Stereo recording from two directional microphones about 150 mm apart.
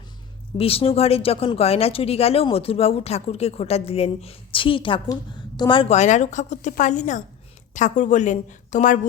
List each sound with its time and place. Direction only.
0.5 s speech: 40° left (ahead or behind)
5.9 s a woman's voice: 50° left (ahead or behind)